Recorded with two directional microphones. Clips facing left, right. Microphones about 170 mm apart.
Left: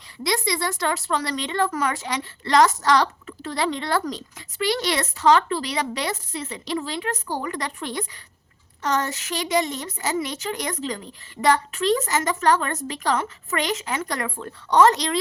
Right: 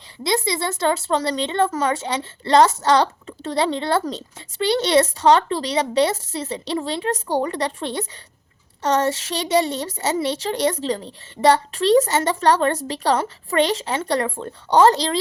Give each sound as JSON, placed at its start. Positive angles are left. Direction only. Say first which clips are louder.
{"t": 0.2, "sound": "a woman's voice", "louder": "right 3 dB", "side_deg": -25}